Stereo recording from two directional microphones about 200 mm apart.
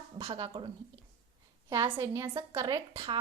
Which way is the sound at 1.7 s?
15° right (ahead or behind).